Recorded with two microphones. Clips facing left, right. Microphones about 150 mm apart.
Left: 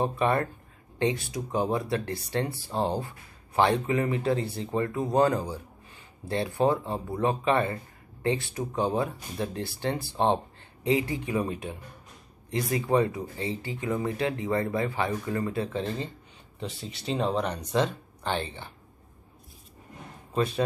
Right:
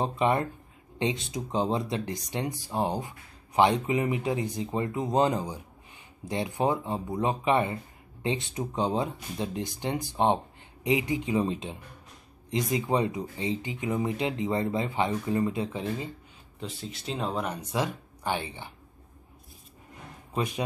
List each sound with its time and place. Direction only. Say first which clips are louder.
0.0 s speech: even; 20° right (ahead or behind)
16.5 s speech: left 1 dB; centre (ahead or behind)
20.3 s speech: left 4 dB; 15° right (ahead or behind)